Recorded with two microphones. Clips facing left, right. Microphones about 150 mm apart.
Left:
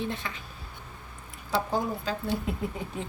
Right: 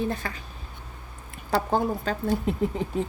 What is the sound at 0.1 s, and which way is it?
Speech, 45° right (ahead or behind).